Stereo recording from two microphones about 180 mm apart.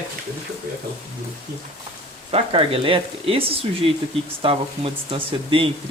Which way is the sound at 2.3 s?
30° right (ahead or behind).